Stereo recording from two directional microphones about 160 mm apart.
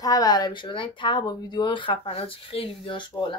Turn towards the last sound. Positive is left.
turn(degrees=30)  # may be behind; listen again after turning